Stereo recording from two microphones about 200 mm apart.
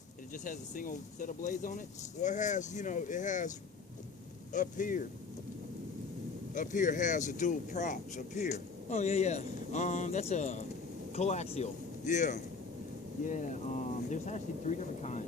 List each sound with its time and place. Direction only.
0.4 s speech: 40° left (ahead or behind)
4.5 s speech: 40° left (ahead or behind)
6.5 s speech: 40° left (ahead or behind)